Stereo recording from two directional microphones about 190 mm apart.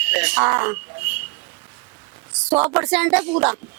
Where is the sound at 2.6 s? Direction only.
10° right (ahead or behind).